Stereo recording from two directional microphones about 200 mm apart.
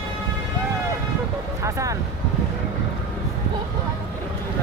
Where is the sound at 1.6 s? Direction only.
15° right (ahead or behind).